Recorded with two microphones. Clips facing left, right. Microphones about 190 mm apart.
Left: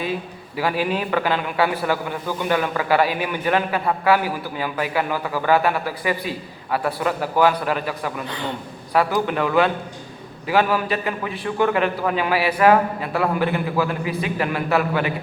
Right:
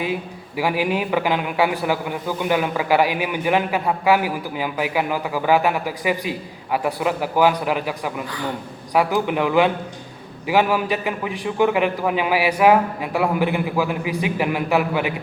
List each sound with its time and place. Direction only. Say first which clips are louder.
0.0 s a man's voice: right 1 dB; 15° right (ahead or behind)
8.3 s a man's voice: right 1 dB; 25° left (ahead or behind)
8.9 s a man's voice: right 1 dB; 15° right (ahead or behind)